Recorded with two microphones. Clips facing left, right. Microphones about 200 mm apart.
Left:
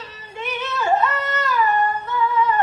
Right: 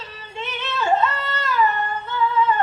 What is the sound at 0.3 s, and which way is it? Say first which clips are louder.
Yodeling: left 1 dB; 25° right (ahead or behind).